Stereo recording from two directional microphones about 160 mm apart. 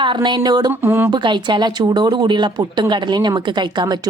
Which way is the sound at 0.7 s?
15° right (ahead or behind).